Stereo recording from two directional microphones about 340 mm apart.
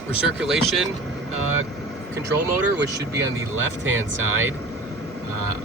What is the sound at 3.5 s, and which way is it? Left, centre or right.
Speech, right.